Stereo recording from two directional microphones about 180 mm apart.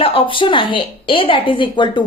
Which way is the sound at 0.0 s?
30° left (ahead or behind).